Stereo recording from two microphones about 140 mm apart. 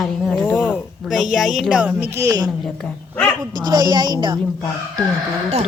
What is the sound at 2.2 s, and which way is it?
Speech, 25° right (ahead or behind).